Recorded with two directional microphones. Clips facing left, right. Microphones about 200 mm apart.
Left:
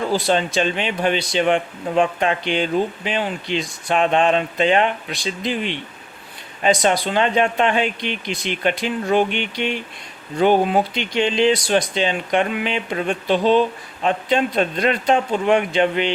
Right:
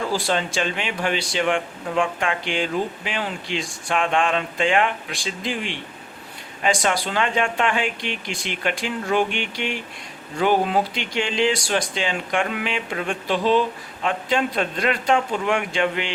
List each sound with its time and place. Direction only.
0.1 s speech: 20° left (ahead or behind)
10.9 s speech: 20° left (ahead or behind)